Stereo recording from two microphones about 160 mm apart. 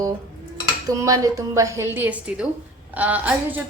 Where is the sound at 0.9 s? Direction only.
20° right (ahead or behind).